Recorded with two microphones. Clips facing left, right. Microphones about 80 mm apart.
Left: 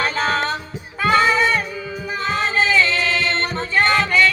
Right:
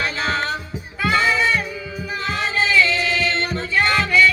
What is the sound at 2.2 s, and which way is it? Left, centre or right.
Music, left.